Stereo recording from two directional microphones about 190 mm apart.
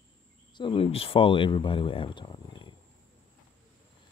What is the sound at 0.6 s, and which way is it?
Speech, 30° left (ahead or behind).